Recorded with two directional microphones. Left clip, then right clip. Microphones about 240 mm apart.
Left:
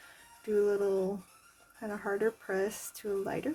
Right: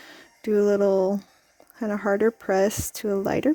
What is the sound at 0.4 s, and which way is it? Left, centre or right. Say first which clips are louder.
Speech: right 9 dB; right.